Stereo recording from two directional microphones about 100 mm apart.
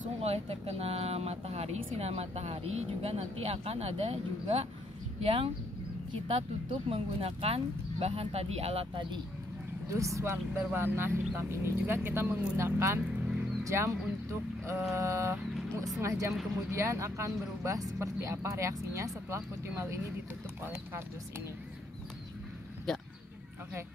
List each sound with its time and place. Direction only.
0.2 s speech: 90° right
6.7 s speech: 65° right (ahead or behind); by 8.8 s 90° right
9.8 s speech: 30° right (ahead or behind)
22.9 s speech: 5° left (ahead or behind)